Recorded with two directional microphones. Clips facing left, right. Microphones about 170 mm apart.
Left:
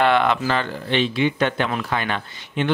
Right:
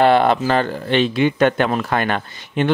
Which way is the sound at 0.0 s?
35° right (ahead or behind).